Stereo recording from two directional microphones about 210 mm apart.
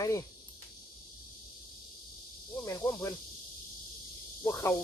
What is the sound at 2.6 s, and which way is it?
Speech, 15° left (ahead or behind).